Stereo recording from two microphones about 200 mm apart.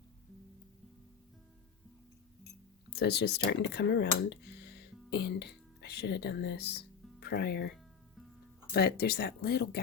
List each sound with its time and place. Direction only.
2.9 s speech: 55° left (ahead or behind)
8.7 s speech: 50° left (ahead or behind)